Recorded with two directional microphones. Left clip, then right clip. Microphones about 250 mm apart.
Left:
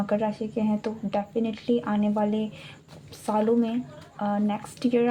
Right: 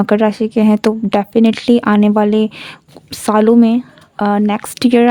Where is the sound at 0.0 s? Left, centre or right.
Right.